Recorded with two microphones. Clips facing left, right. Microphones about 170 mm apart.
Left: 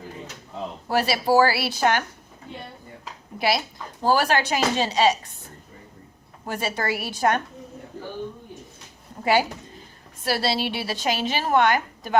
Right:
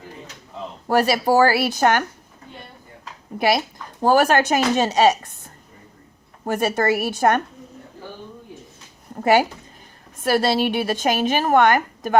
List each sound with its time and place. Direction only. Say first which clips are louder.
0.9 s a woman's voice: right 4 dB; 45° right (ahead or behind)
3.3 s a woman's voice: right 4 dB; 50° right (ahead or behind)
9.2 s a woman's voice: right 4 dB; 50° right (ahead or behind)